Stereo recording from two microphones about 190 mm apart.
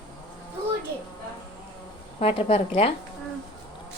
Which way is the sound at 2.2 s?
30° left (ahead or behind).